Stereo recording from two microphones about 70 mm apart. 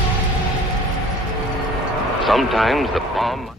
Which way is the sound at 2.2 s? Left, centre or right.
Centre.